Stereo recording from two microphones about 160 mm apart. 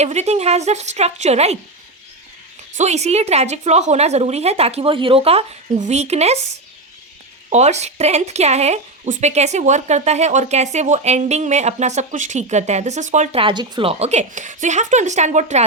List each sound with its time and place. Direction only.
0.0 s speech: 45° right (ahead or behind)
2.7 s speech: 45° right (ahead or behind)
7.5 s speech: 45° right (ahead or behind)
13.4 s speech: 30° right (ahead or behind); by 15.6 s 45° right (ahead or behind)